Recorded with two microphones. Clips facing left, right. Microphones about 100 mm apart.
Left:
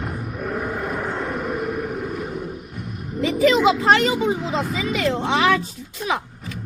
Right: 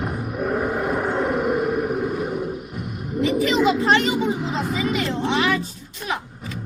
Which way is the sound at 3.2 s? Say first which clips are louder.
Left 2 dB; 90° left.